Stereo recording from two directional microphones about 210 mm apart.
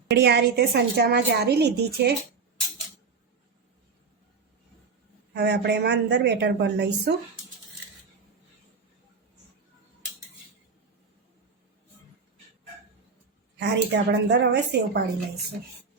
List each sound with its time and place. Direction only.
0.1 s a woman's voice: 55° right (ahead or behind)
5.3 s a woman's voice: 55° right (ahead or behind)
13.6 s a woman's voice: 55° right (ahead or behind)